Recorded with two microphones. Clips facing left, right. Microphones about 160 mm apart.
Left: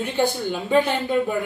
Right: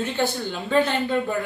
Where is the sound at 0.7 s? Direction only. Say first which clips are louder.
Left 1 dB; 15° left (ahead or behind).